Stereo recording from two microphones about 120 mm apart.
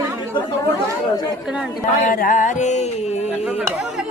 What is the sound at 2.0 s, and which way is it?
Music, 90° left.